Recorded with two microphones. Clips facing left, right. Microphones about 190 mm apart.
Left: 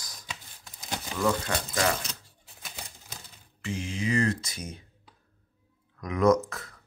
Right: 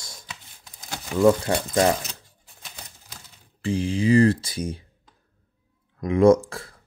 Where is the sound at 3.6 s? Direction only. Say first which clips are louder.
Right 9 dB; 30° right (ahead or behind).